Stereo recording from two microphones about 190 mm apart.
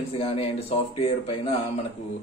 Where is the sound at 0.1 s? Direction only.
30° left (ahead or behind).